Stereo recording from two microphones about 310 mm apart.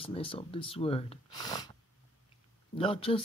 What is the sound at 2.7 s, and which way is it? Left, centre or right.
Speech, centre.